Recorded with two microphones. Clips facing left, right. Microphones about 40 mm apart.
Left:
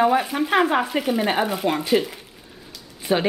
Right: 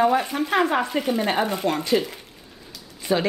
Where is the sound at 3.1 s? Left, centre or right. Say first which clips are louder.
Left 1 dB; left.